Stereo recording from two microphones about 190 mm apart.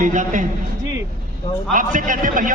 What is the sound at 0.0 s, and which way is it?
Speech, 40° right (ahead or behind).